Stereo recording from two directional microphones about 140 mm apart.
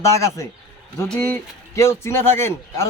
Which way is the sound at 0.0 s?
20° left (ahead or behind).